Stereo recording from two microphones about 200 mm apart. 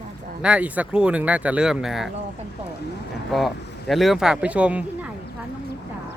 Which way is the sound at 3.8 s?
Centre (ahead or behind).